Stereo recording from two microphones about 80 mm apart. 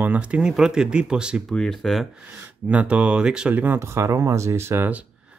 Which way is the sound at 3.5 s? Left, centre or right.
Right.